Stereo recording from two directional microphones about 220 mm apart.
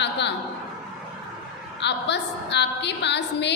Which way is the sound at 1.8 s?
50° left (ahead or behind).